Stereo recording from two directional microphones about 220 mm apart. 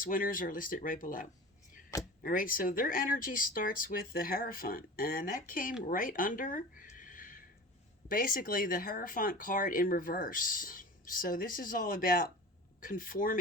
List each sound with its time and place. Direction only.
0.0 s speech: 40° left (ahead or behind)